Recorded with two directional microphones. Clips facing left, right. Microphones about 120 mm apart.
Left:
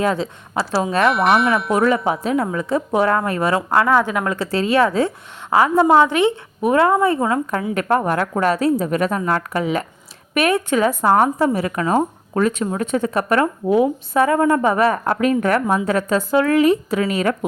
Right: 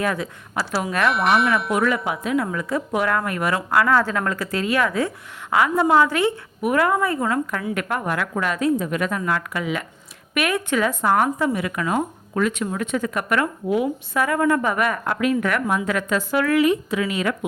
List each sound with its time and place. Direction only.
0.0 s a woman's voice: 25° left (ahead or behind)
1.0 s speech: centre (ahead or behind)
1.7 s a woman's voice: 30° left (ahead or behind)
3.9 s a woman's voice: 15° left (ahead or behind)
7.7 s speech: 35° left (ahead or behind)